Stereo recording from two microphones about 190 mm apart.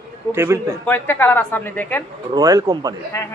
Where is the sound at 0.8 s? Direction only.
10° left (ahead or behind).